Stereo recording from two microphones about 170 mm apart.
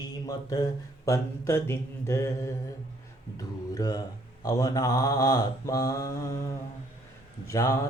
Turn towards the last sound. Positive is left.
turn(degrees=20)  # may be behind; listen again after turning